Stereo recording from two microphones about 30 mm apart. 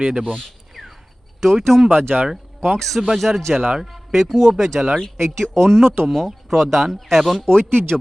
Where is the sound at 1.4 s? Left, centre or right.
Centre.